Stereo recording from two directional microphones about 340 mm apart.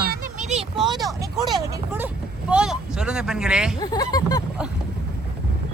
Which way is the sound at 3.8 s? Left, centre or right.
Centre.